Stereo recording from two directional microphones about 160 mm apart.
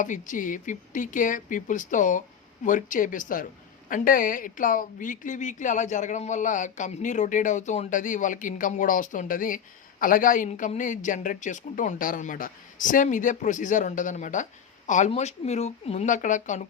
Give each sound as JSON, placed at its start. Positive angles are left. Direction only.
{"t": 0.0, "sound": "speech", "side_deg": 50}